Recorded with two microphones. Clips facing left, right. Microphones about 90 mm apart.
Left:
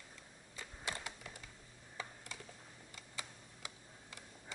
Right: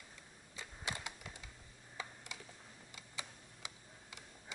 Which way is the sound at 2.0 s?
20° right (ahead or behind).